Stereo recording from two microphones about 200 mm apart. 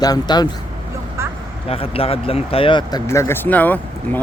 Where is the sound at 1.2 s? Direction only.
15° right (ahead or behind).